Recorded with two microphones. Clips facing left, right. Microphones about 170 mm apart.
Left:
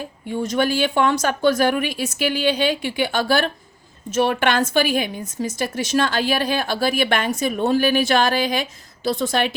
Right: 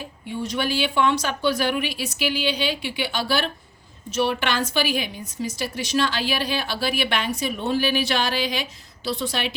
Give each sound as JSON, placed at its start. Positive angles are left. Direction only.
{"t": 0.3, "sound": "a woman's voice", "side_deg": 45}